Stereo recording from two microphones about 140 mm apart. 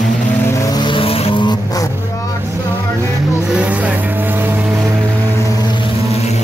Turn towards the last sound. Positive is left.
turn(degrees=-10)  # may be behind; listen again after turning